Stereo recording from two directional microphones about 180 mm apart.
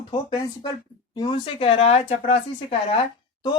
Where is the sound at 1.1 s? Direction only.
25° left (ahead or behind).